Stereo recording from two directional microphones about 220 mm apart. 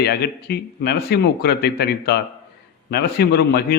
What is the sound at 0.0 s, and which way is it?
A man's voice, 45° left (ahead or behind).